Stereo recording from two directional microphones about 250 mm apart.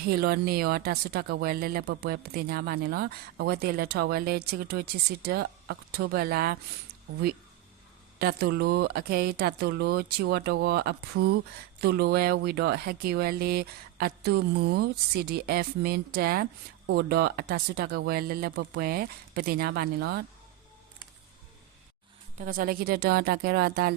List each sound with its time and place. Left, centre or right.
0.0 s speech: right
8.2 s speech: right
22.4 s speech: right